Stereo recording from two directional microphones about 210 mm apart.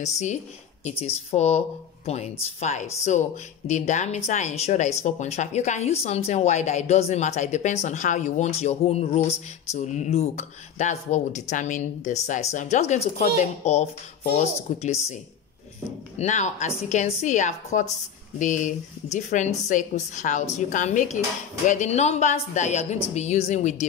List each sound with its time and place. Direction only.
0.0 s speech: 35° left (ahead or behind)
16.2 s speech: 35° left (ahead or behind)